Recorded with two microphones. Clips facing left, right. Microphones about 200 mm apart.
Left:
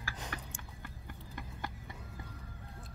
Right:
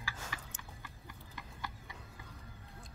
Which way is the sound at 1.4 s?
50° left (ahead or behind).